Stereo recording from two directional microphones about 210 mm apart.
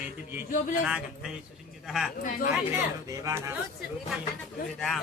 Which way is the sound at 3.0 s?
15° right (ahead or behind).